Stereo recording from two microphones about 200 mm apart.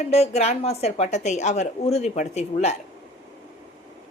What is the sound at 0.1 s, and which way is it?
A woman's voice, 30° left (ahead or behind).